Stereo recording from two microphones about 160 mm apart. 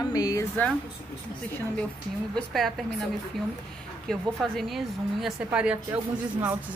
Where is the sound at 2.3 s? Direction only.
Centre (ahead or behind).